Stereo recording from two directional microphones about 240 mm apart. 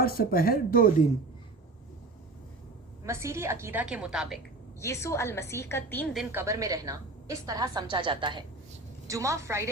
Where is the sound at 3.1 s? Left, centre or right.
Centre.